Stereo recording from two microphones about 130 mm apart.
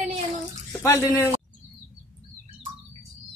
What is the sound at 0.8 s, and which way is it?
Speech, 20° left (ahead or behind).